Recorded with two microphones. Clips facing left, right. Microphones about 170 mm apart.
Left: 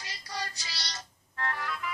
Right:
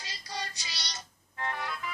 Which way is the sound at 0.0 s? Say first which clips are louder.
Left 1 dB; 25° right (ahead or behind).